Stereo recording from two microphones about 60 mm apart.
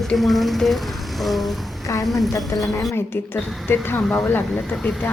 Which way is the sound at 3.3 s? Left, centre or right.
Left.